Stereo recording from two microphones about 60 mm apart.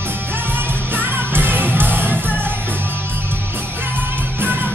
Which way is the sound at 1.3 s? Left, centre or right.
Right.